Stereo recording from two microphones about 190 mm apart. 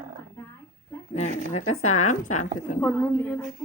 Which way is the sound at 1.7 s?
90° left.